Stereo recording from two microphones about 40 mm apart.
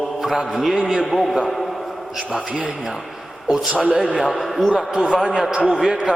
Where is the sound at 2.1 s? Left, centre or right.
Centre.